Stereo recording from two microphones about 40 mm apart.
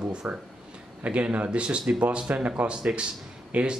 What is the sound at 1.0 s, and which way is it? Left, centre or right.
Speech, right.